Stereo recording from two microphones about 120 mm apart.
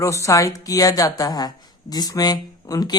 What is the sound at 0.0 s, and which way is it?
A woman's voice, 25° left (ahead or behind).